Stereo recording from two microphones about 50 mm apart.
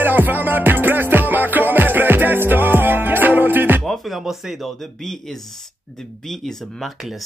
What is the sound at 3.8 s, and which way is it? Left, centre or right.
Music, centre.